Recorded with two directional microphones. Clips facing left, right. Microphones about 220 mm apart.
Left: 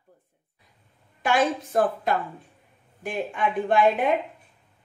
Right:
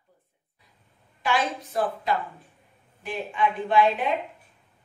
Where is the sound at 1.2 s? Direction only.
50° left (ahead or behind).